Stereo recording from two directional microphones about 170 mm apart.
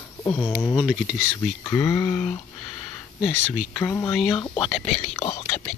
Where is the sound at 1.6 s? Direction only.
15° left (ahead or behind).